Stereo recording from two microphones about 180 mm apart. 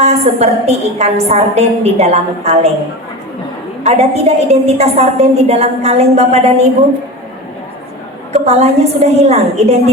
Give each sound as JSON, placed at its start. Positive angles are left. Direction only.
{"t": 0.0, "sound": "a woman's voice", "side_deg": -35}
{"t": 3.8, "sound": "a woman's voice", "side_deg": -35}
{"t": 8.3, "sound": "a woman's voice", "side_deg": -35}